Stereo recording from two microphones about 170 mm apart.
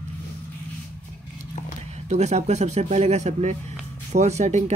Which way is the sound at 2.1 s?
40° right (ahead or behind).